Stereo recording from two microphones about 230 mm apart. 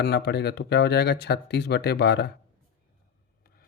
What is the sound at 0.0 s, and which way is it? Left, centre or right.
Speech, left.